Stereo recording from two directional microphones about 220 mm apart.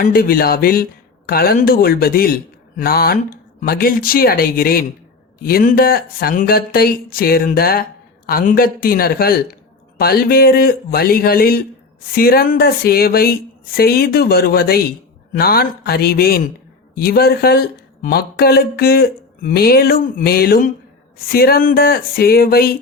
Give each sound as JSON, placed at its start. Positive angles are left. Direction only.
{"t": 0.0, "sound": "speech", "side_deg": 40}